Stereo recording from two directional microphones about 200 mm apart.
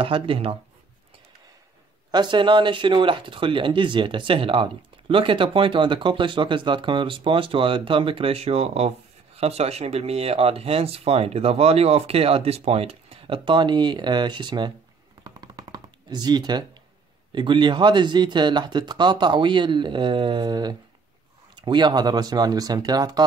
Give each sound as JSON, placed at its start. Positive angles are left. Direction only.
{"t": 0.0, "sound": "speech", "side_deg": -25}
{"t": 2.0, "sound": "speech", "side_deg": -20}
{"t": 15.2, "sound": "a sound", "side_deg": -20}
{"t": 17.3, "sound": "speech", "side_deg": -25}